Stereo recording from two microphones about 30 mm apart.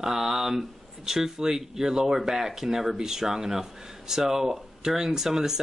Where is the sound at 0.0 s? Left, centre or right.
Centre.